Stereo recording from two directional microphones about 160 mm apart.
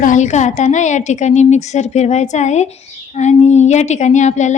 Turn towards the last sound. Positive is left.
turn(degrees=50)  # may be behind; listen again after turning